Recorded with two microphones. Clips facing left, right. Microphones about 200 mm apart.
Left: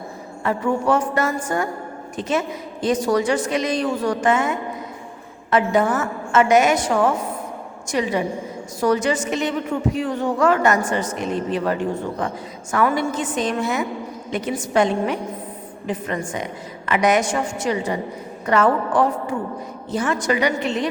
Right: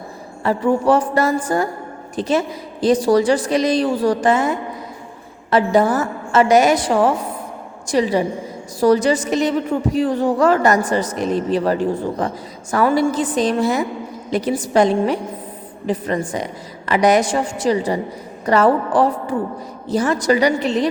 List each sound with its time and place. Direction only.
0.4 s speech: 35° right (ahead or behind)